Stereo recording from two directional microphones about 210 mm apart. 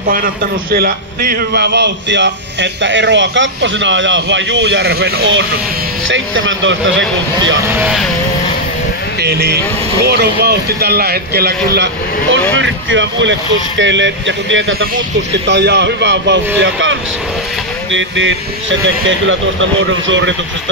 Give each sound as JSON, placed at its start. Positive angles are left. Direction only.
{"t": 0.1, "sound": "a man's voice", "side_deg": -45}
{"t": 7.8, "sound": "speech", "side_deg": 0}
{"t": 9.2, "sound": "a man's voice", "side_deg": -50}
{"t": 15.3, "sound": "a man's voice", "side_deg": -55}